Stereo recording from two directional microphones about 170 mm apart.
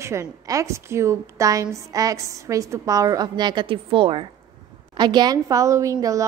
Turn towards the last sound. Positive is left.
turn(degrees=-20)  # may be behind; listen again after turning